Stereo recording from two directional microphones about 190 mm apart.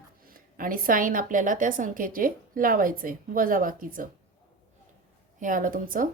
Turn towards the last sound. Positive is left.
turn(degrees=-45)  # may be behind; listen again after turning